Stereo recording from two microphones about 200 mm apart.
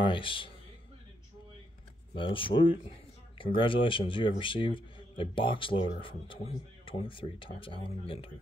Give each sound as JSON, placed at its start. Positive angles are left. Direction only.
{"t": 0.0, "sound": "a man's voice", "side_deg": 25}
{"t": 2.1, "sound": "speech", "side_deg": 25}